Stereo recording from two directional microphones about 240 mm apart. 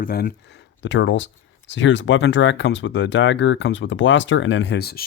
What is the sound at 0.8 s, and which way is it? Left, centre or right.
Speech, left.